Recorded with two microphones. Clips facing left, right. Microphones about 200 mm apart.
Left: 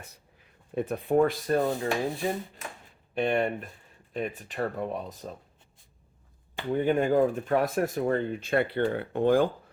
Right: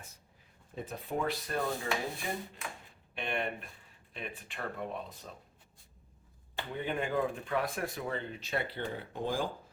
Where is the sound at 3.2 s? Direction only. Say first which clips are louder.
Left 10 dB; 45° left (ahead or behind).